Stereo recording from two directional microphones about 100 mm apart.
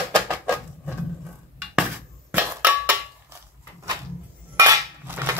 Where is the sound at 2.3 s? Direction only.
15° right (ahead or behind).